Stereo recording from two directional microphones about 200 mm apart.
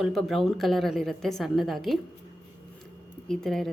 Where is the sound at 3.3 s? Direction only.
Centre (ahead or behind).